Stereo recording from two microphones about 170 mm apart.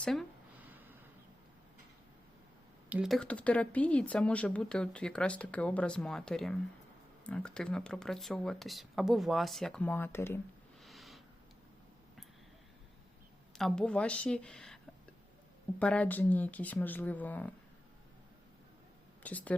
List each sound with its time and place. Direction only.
0.0 s speech: centre (ahead or behind)
0.6 s snort: 10° right (ahead or behind)
2.9 s speech: centre (ahead or behind); by 10.4 s 15° left (ahead or behind)
10.8 s a sound: centre (ahead or behind)
13.6 s speech: 5° left (ahead or behind)
15.8 s speech: 10° left (ahead or behind)
19.2 s speech: 10° left (ahead or behind)